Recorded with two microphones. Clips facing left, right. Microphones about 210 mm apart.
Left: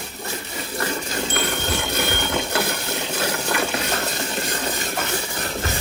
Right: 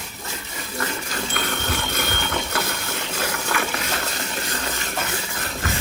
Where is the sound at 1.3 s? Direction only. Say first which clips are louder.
Left 1 dB; 25° left (ahead or behind).